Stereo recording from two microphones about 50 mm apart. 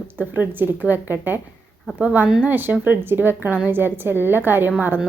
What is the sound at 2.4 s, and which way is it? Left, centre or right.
A woman's voice, right.